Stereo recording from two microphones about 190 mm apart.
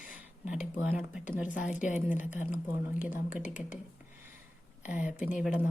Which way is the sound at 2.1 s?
40° left (ahead or behind).